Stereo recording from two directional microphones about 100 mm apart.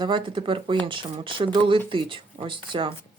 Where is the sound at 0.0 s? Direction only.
55° right (ahead or behind).